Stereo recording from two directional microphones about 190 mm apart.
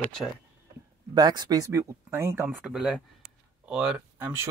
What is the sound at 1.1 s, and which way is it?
A man's voice, 20° right (ahead or behind).